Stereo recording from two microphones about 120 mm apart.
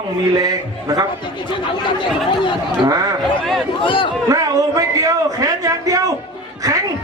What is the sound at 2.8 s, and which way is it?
Speech, 30° right (ahead or behind).